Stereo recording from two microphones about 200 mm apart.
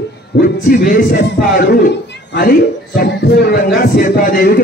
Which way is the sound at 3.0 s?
60° left (ahead or behind).